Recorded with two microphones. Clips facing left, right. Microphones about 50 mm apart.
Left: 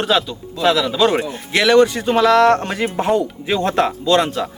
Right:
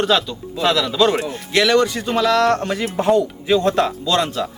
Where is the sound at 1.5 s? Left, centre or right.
Centre.